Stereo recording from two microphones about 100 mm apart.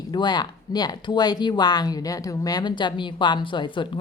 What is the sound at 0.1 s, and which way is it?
Speech, 45° left (ahead or behind).